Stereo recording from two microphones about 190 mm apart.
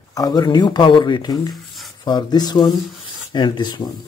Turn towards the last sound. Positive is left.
turn(degrees=25)  # may be behind; listen again after turning